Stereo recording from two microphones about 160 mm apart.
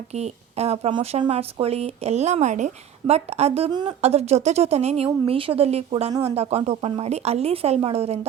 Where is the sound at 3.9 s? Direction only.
40° right (ahead or behind).